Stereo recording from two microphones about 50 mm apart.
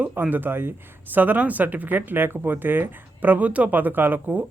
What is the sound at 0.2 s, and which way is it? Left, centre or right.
Speech, right.